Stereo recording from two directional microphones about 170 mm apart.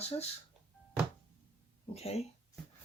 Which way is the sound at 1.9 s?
35° left (ahead or behind).